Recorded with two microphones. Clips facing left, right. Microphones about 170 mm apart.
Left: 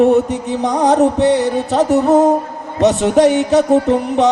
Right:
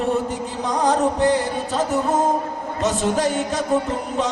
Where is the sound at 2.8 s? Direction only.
70° left (ahead or behind).